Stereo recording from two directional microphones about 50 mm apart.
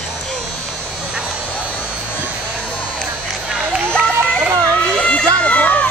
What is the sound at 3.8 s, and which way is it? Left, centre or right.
Run, right.